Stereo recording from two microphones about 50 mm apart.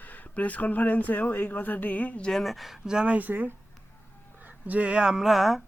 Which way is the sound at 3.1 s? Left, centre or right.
Right.